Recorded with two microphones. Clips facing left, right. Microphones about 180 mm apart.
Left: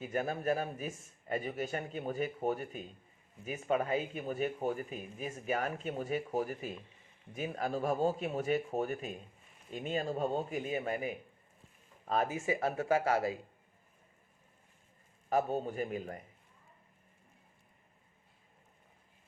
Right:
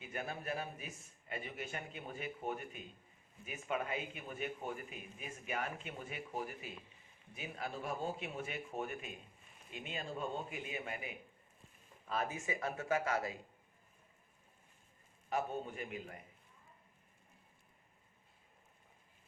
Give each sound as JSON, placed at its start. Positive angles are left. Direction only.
{"t": 0.0, "sound": "a man's voice", "side_deg": 45}
{"t": 15.3, "sound": "speech", "side_deg": 40}